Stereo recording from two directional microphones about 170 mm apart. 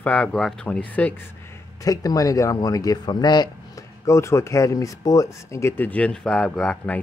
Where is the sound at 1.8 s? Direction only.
20° left (ahead or behind).